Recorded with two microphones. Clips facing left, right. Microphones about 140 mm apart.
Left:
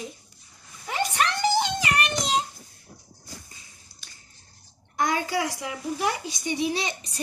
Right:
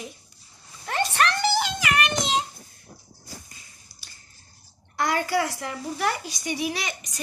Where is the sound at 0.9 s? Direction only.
15° left (ahead or behind); by 2.4 s 35° left (ahead or behind).